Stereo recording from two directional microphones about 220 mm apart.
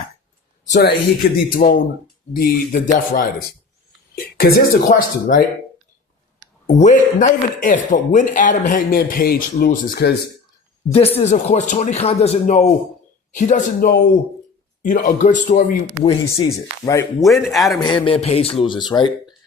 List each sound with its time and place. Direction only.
0.7 s speech: 45° left (ahead or behind)
6.7 s speech: 35° left (ahead or behind)
10.9 s speech: 25° left (ahead or behind)
16.0 s speech: 20° left (ahead or behind)
17.2 s speech: centre (ahead or behind)
17.7 s speech: 20° left (ahead or behind)